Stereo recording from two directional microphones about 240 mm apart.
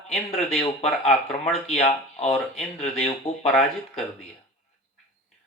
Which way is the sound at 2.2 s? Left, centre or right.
Centre.